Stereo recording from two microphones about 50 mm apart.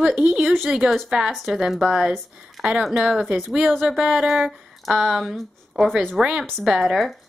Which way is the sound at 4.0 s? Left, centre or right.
Centre.